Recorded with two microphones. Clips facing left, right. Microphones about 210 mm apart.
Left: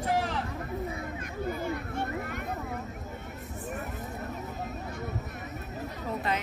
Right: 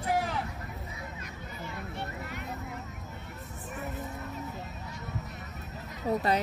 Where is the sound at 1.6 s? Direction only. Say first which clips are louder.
Left 6 dB; 50° left (ahead or behind).